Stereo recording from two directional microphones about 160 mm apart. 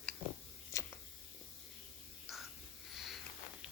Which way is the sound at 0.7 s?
20° left (ahead or behind).